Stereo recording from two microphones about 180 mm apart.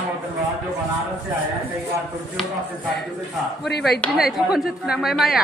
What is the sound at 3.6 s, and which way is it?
Speech, 65° left (ahead or behind).